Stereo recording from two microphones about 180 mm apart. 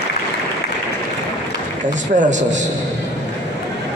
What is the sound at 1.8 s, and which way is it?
Speech, 45° right (ahead or behind).